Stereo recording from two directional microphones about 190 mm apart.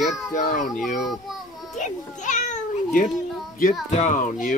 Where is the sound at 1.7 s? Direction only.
40° left (ahead or behind).